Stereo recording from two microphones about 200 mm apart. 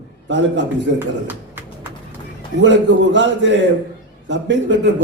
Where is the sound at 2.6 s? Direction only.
65° right (ahead or behind).